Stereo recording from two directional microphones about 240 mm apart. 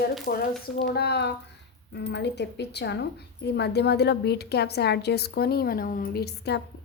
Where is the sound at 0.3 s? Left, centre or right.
Left.